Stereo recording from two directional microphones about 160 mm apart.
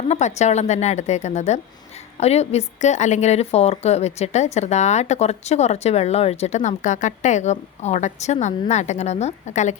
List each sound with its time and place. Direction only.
0.1 s a woman's voice: 45° left (ahead or behind)